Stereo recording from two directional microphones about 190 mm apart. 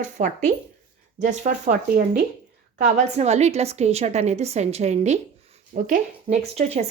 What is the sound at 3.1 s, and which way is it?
Speech, 35° right (ahead or behind).